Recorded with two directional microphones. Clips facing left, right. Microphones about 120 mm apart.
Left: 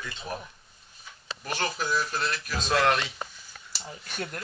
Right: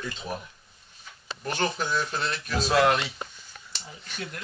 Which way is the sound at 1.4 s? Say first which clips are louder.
Right 2 dB; centre (ahead or behind).